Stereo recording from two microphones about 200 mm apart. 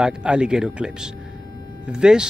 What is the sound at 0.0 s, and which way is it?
Speech, 5° right (ahead or behind).